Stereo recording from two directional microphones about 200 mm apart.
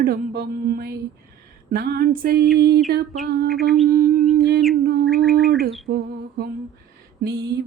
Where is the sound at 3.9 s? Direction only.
45° right (ahead or behind).